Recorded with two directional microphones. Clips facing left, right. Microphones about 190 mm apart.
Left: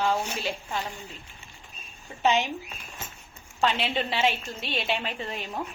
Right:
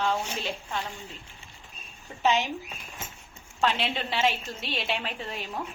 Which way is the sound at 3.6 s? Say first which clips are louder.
Left 1 dB; centre (ahead or behind).